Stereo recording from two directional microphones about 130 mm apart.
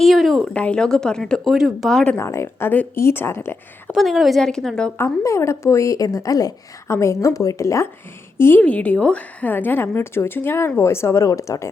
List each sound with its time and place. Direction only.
0.0 s speech: centre (ahead or behind)
2.1 s a woman's voice: 20° left (ahead or behind)
3.9 s speech: centre (ahead or behind)
4.9 s a woman's voice: 20° left (ahead or behind)